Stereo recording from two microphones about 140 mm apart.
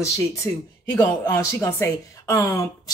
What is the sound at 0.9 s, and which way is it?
A woman's voice, 20° left (ahead or behind).